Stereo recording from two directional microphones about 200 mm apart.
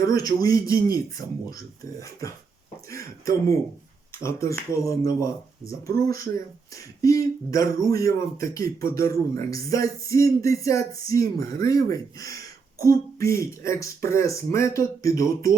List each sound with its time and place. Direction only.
0.0 s speech: 20° left (ahead or behind)